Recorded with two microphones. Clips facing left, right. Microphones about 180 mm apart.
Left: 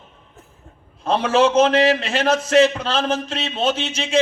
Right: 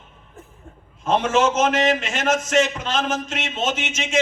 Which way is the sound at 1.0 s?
35° left (ahead or behind).